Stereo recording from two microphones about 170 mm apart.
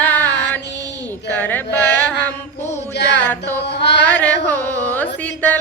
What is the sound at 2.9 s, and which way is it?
Music, 90° left.